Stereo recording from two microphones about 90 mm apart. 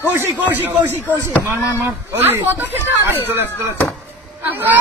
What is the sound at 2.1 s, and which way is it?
Speech, 20° right (ahead or behind).